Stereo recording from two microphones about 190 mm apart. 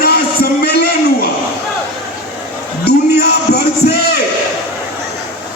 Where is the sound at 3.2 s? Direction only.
55° left (ahead or behind).